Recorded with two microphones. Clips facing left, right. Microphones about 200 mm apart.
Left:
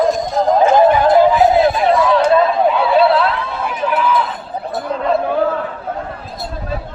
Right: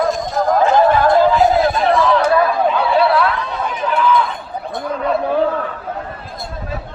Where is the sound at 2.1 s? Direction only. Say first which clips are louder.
Left 2 dB; 25° left (ahead or behind).